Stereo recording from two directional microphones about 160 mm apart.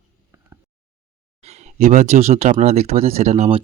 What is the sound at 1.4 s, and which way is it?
Speech, 45° right (ahead or behind).